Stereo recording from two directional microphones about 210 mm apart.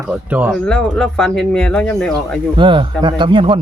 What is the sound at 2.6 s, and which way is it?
Speech, 25° right (ahead or behind).